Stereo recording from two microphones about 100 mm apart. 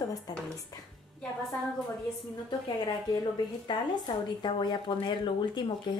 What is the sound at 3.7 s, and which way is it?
Speech, 50° left (ahead or behind).